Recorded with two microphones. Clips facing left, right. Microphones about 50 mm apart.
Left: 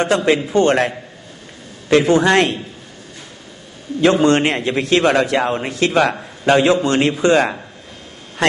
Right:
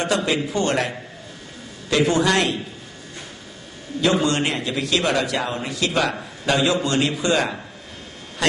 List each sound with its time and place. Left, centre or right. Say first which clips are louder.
0.3 s a man's voice: left 7 dB; left
4.0 s a man's voice: left 7 dB; left